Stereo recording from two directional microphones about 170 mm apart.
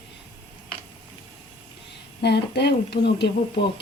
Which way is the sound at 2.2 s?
80° left.